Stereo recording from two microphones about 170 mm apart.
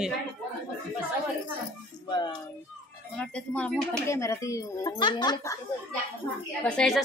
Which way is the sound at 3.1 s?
10° left (ahead or behind).